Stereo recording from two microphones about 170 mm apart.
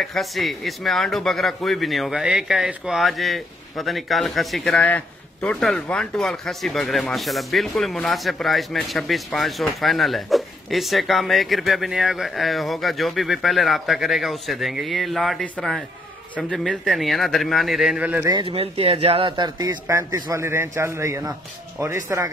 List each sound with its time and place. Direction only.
0.0 s speech: centre (ahead or behind)
18.2 s a man's voice: 25° right (ahead or behind)